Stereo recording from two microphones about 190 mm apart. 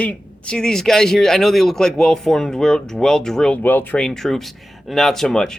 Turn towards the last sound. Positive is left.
turn(degrees=0)  # may be behind; listen again after turning